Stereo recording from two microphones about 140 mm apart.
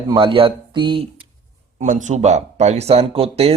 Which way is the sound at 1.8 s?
65° right (ahead or behind).